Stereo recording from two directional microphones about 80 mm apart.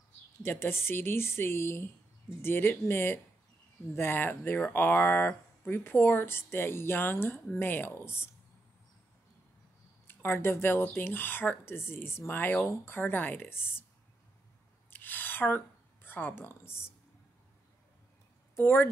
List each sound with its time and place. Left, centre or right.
0.4 s speech: left
10.0 s speech: left
14.9 s a sound: left
18.6 s speech: left